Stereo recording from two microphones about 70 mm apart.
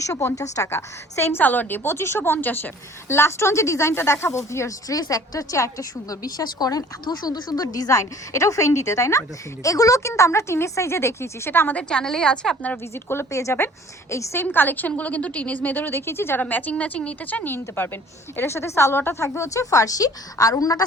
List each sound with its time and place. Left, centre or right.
0.0 s a woman's voice: left
1.4 s a woman's voice: left
11.7 s a woman's voice: centre
12.7 s a woman's voice: left
14.4 s a woman's voice: left
16.4 s a woman's voice: left